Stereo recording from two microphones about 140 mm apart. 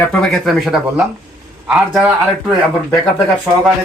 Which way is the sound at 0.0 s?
10° left (ahead or behind).